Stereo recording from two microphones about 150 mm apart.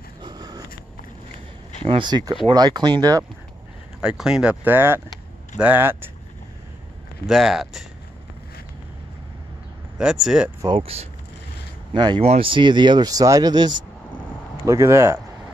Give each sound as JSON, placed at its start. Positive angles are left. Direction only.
{"t": 0.2, "sound": "sniff", "side_deg": -25}
{"t": 1.9, "sound": "speech", "side_deg": -30}
{"t": 4.0, "sound": "speech", "side_deg": -5}
{"t": 7.2, "sound": "speech", "side_deg": -5}
{"t": 9.9, "sound": "speech", "side_deg": -5}
{"t": 10.8, "sound": "speech", "side_deg": -40}
{"t": 11.9, "sound": "speech", "side_deg": -30}
{"t": 14.7, "sound": "speech", "side_deg": -20}